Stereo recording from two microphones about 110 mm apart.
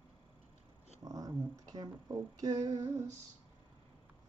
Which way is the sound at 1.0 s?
30° right (ahead or behind).